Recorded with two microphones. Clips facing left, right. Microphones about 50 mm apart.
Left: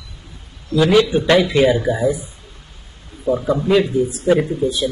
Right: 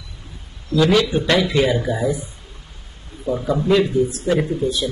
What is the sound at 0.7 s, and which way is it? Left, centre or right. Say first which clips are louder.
Speech: left 2 dB; centre.